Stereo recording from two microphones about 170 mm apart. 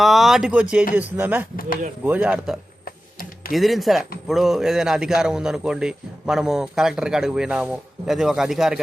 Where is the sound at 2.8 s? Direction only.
60° left (ahead or behind).